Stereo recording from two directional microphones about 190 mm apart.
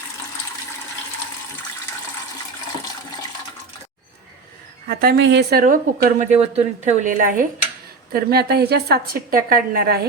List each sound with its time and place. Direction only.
4.9 s a woman's voice: 50° right (ahead or behind)